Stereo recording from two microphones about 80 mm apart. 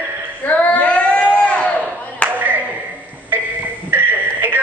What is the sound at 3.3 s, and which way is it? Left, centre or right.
Music, right.